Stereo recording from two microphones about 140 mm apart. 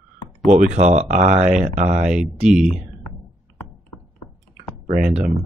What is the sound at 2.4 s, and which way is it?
Speech, 5° right (ahead or behind).